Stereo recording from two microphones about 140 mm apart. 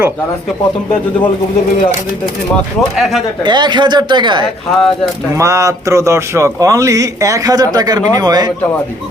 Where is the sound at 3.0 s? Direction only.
Centre (ahead or behind).